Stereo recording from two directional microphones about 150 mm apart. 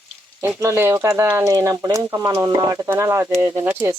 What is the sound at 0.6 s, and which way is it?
Speech, 20° right (ahead or behind).